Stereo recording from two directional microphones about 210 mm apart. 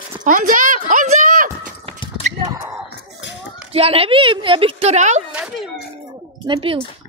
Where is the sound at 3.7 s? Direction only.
30° right (ahead or behind).